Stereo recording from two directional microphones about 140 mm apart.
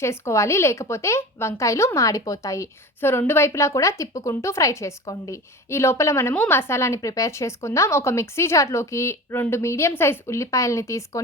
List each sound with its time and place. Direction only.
0.0 s speech: 20° left (ahead or behind)